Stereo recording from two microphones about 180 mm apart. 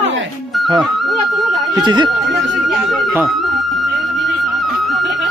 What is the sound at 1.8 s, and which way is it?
Speech, 25° right (ahead or behind).